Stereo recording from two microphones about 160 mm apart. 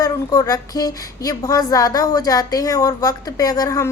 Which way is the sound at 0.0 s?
25° left (ahead or behind).